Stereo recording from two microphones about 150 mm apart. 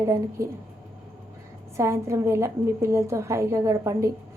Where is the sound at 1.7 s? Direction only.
20° right (ahead or behind).